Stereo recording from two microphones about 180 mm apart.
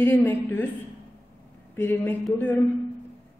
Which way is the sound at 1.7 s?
10° left (ahead or behind).